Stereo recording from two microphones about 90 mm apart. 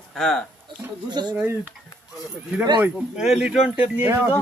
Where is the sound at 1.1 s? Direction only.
50° right (ahead or behind).